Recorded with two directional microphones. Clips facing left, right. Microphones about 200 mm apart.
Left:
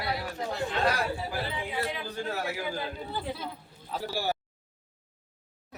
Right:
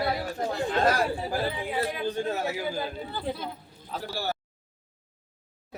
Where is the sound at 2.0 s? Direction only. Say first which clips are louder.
Right 5 dB; 25° right (ahead or behind).